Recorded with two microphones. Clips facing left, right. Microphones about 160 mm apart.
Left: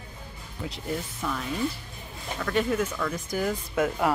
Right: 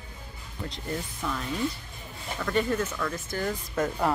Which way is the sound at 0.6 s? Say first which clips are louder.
Left 2 dB; 5° left (ahead or behind).